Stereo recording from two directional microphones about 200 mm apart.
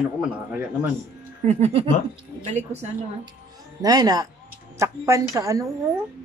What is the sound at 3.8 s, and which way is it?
Speech, 20° right (ahead or behind).